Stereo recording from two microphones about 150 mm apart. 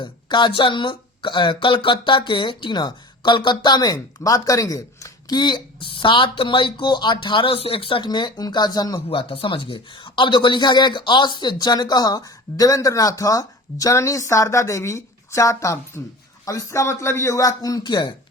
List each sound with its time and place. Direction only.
0.0 s speech: 30° left (ahead or behind)
9.0 s a man's voice: 40° left (ahead or behind)